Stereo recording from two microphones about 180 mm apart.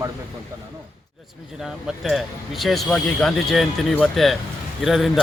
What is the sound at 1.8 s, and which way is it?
Speech, centre (ahead or behind).